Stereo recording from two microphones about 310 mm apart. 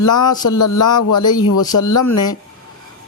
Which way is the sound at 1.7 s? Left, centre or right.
Left.